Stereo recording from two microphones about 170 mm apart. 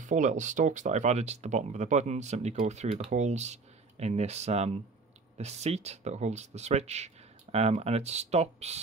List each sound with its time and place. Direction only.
0.0 s speech: 45° right (ahead or behind)